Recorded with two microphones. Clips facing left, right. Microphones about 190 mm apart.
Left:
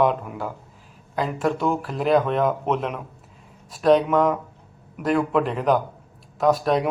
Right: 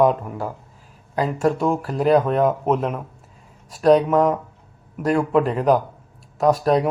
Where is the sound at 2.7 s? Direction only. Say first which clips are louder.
Right 3 dB; 35° right (ahead or behind).